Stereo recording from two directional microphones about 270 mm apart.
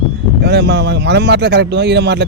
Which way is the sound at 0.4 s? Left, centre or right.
Right.